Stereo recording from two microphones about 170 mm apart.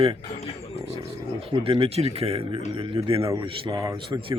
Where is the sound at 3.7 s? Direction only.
20° right (ahead or behind).